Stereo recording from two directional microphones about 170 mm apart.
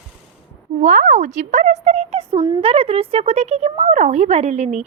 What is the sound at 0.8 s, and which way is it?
A woman's voice, 45° right (ahead or behind).